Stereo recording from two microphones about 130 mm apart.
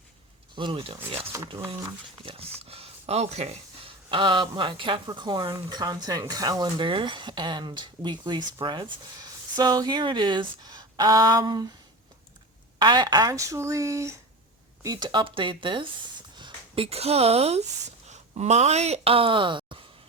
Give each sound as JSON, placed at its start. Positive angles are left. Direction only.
{"t": 0.5, "sound": "speech", "side_deg": -40}
{"t": 1.5, "sound": "speech", "side_deg": -25}
{"t": 2.2, "sound": "speech", "side_deg": -50}
{"t": 12.8, "sound": "speech", "side_deg": -35}
{"t": 14.8, "sound": "speech", "side_deg": -35}